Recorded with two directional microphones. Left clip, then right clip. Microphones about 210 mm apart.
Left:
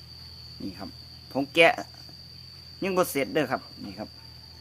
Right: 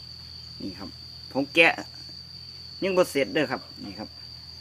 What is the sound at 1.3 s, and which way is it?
Speech, 10° left (ahead or behind).